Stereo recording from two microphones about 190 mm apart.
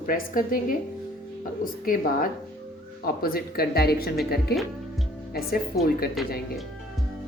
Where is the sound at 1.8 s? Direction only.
45° left (ahead or behind).